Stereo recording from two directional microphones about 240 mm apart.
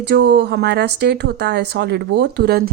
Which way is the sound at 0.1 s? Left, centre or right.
Right.